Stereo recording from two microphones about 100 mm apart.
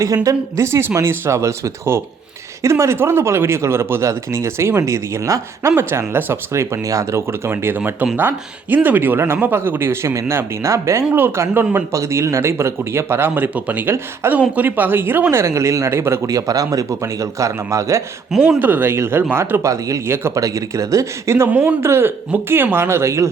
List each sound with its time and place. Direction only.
0.0 s a man's voice: 35° right (ahead or behind)
18.6 s speech: 20° right (ahead or behind)